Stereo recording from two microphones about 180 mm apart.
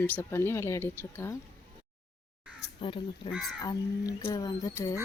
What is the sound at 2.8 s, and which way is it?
Speech, 30° left (ahead or behind).